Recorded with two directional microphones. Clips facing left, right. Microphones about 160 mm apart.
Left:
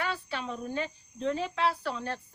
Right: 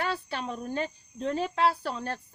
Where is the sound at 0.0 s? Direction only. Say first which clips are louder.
Right 2 dB; 40° right (ahead or behind).